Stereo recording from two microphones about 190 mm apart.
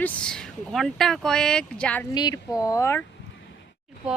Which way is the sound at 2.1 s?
20° left (ahead or behind).